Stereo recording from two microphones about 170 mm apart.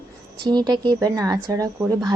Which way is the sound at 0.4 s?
25° right (ahead or behind).